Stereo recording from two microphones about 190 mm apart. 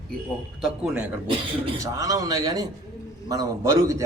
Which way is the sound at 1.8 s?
15° right (ahead or behind).